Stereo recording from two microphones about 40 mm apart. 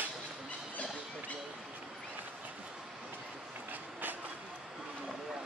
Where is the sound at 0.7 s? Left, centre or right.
Left.